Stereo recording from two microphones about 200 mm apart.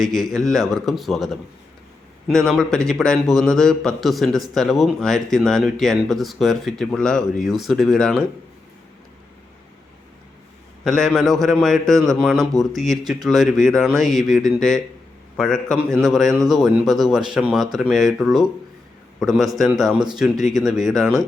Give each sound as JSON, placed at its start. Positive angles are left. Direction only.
{"t": 0.0, "sound": "a man's voice", "side_deg": -20}
{"t": 0.3, "sound": "a man's voice", "side_deg": 0}
{"t": 10.8, "sound": "a man's voice", "side_deg": 0}